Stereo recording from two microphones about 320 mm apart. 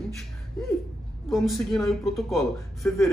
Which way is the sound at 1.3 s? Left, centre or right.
Centre.